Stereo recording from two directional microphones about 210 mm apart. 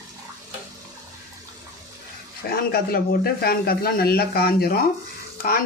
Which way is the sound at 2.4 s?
45° left (ahead or behind).